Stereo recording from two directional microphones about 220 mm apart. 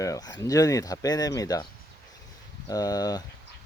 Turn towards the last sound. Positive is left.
turn(degrees=15)  # may be behind; listen again after turning